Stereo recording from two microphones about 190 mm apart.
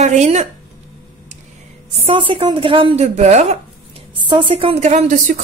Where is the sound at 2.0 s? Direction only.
25° right (ahead or behind).